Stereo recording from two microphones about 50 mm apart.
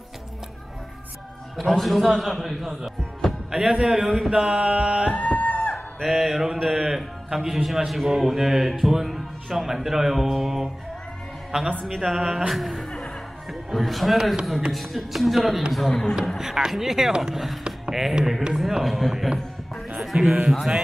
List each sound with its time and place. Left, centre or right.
1.6 s a man's voice: centre
3.8 s mantra: centre
4.6 s music: right
5.1 s music: left
6.0 s mantra: centre
7.3 s speech: centre
12.1 s mantra: centre
12.5 s music: centre
13.5 s speech: centre
16.3 s speech: centre
17.6 s a sound: centre
18.5 s speech: centre
20.4 s mantra: centre